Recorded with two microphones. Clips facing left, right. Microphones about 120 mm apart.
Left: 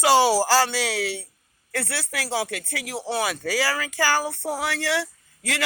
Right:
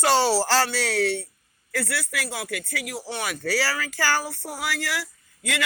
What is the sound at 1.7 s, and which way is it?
Speech, 30° left (ahead or behind).